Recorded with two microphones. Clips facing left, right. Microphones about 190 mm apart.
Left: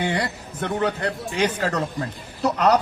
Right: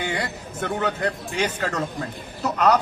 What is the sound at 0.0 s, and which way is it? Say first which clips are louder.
A man's voice: left 3 dB; 35° left (ahead or behind).